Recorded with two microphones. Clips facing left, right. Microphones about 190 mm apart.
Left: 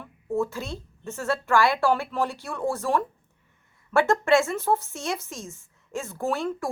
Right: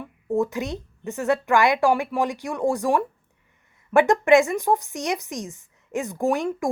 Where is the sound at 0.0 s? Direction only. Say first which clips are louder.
Right 3 dB; 15° right (ahead or behind).